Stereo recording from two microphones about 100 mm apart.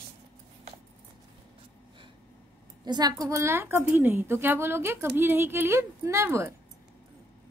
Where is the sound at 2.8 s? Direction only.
45° right (ahead or behind); by 6.6 s 25° right (ahead or behind).